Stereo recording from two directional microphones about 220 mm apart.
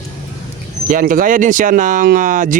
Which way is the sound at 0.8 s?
35° right (ahead or behind).